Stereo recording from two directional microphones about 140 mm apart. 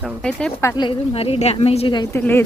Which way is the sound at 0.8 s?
40° left (ahead or behind).